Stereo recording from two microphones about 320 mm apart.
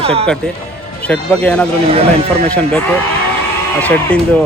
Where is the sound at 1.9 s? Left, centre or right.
Centre.